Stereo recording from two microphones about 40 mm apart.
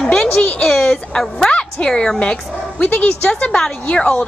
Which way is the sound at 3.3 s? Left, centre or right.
Centre.